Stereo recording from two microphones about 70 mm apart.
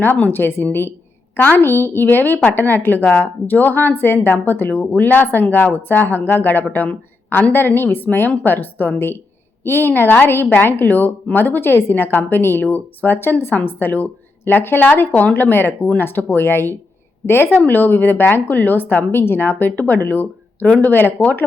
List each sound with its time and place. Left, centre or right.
0.0 s a woman's voice: left